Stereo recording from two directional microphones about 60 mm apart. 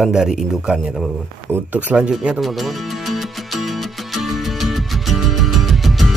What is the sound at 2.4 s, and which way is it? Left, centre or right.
Music, centre.